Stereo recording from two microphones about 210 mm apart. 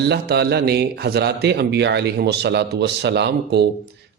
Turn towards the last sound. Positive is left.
turn(degrees=-55)  # may be behind; listen again after turning